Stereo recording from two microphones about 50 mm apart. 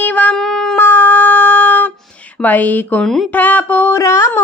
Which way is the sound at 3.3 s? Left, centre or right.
Left.